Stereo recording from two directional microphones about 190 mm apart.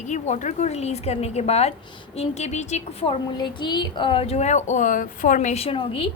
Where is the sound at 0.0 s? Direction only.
40° left (ahead or behind).